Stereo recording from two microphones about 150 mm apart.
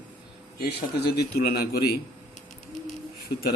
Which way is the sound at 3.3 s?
90° left.